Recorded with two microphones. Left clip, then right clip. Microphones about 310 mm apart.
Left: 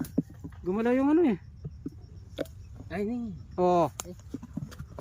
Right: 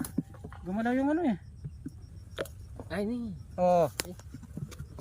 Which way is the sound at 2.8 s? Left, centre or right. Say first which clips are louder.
Left 1 dB; centre.